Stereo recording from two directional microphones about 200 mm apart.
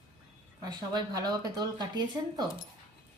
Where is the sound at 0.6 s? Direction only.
20° right (ahead or behind).